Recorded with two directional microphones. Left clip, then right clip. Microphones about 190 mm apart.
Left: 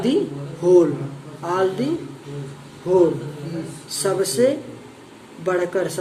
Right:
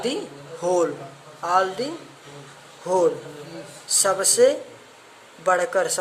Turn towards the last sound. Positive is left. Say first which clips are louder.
# right 1 dB
turn(degrees=-30)  # may be behind; listen again after turning